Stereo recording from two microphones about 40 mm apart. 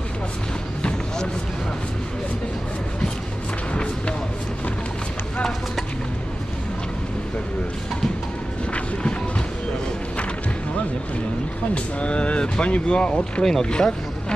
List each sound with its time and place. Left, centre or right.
11.7 s speech: left